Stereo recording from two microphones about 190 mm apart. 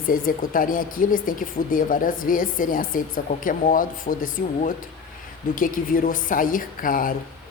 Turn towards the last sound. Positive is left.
turn(degrees=45)  # may be behind; listen again after turning